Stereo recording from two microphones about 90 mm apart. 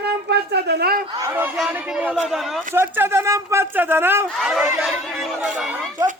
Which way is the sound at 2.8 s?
25° right (ahead or behind).